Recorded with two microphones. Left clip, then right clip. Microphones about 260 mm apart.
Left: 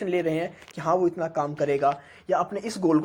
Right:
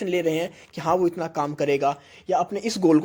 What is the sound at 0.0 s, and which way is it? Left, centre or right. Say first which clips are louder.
Speech: right 2 dB; right.